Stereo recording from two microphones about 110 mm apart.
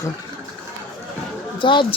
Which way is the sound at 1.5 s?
50° left (ahead or behind).